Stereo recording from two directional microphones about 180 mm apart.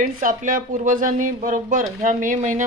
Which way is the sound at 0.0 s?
50° right (ahead or behind).